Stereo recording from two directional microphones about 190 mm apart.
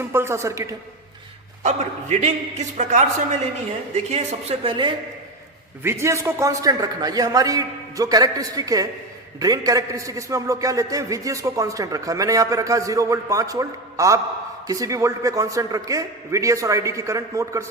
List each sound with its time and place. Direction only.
0.0 s a man's voice: 15° right (ahead or behind)
1.6 s a woman's voice: 40° right (ahead or behind)
5.8 s a man's voice: 15° right (ahead or behind)